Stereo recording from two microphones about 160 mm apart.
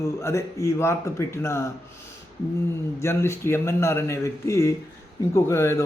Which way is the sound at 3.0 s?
15° left (ahead or behind).